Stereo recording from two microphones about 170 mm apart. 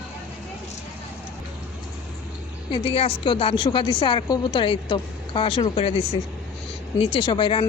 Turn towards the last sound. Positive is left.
turn(degrees=30)  # may be behind; listen again after turning